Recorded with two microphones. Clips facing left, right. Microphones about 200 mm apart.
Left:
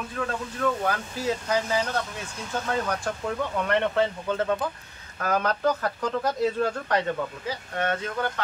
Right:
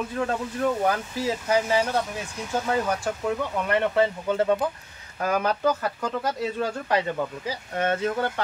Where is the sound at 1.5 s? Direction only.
10° right (ahead or behind).